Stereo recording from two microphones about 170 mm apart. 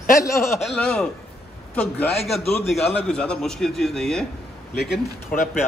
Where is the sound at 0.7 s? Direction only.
5° left (ahead or behind).